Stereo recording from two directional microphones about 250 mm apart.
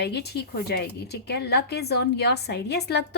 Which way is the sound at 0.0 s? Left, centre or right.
Left.